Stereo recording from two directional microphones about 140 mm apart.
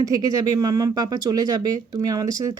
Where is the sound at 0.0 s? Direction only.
25° right (ahead or behind).